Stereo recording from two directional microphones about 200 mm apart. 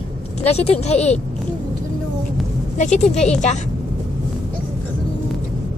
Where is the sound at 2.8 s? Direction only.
35° left (ahead or behind).